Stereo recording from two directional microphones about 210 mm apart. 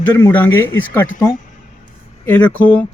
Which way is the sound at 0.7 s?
70° left (ahead or behind).